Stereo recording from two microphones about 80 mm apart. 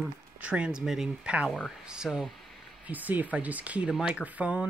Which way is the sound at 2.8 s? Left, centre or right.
Right.